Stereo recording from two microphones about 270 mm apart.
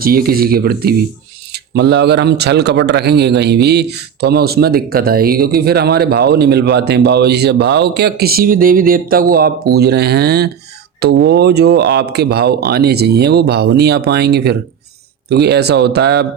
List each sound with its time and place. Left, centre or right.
0.0 s a man's voice: right